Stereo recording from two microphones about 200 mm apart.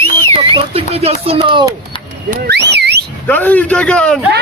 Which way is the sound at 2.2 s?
55° right (ahead or behind).